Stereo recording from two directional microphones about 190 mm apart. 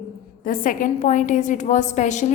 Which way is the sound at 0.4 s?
45° left (ahead or behind).